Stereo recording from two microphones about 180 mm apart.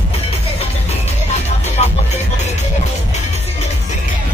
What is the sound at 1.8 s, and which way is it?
Music, 40° left (ahead or behind).